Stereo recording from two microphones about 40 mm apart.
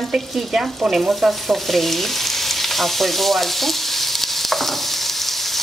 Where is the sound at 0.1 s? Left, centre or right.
Centre.